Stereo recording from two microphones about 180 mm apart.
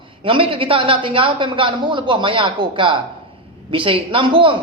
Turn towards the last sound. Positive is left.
turn(degrees=-30)  # may be behind; listen again after turning